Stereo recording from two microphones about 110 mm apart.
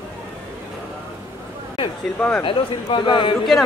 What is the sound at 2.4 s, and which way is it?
Speech, 50° left (ahead or behind).